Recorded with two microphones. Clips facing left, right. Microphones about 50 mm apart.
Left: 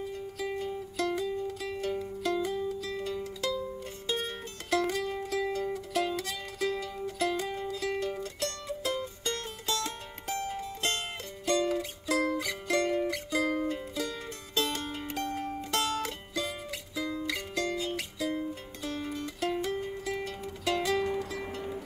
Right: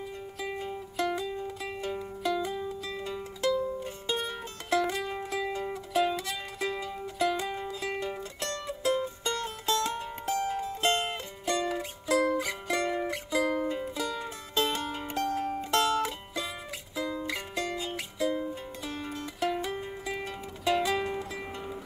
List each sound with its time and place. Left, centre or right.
0.5 s music: right
17.0 s music: centre